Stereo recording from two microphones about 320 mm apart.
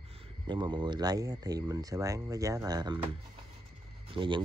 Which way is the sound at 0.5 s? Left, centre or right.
Centre.